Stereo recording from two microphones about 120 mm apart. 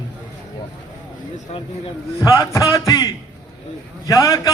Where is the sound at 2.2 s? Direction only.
30° left (ahead or behind).